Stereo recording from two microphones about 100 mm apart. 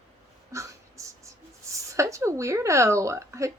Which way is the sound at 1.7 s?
30° right (ahead or behind).